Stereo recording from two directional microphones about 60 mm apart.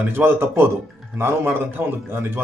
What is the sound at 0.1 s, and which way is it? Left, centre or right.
Speech, right.